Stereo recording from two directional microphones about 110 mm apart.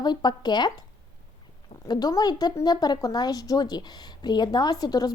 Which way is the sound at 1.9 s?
35° left (ahead or behind).